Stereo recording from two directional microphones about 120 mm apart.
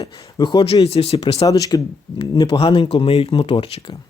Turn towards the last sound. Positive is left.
turn(degrees=50)  # may be behind; listen again after turning